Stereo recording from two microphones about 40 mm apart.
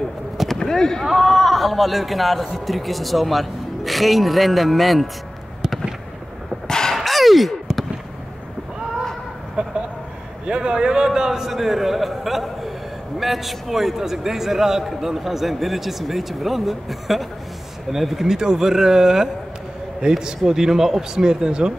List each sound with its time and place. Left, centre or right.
0.7 s fireworks: centre
1.0 s a man's voice: centre
6.7 s a sound: centre
7.0 s a sound: centre
9.6 s vehicle: right
10.4 s a man's voice: right